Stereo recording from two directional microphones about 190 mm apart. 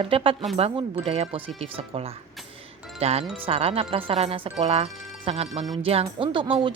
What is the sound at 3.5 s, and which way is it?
A woman's voice, 30° right (ahead or behind).